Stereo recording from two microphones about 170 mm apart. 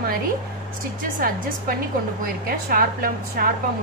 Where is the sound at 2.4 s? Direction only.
55° right (ahead or behind).